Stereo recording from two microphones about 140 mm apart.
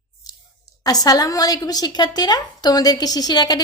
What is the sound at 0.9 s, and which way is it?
A woman's voice, 25° left (ahead or behind).